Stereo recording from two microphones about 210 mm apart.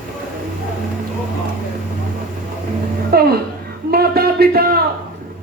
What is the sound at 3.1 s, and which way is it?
Music, 50° right (ahead or behind).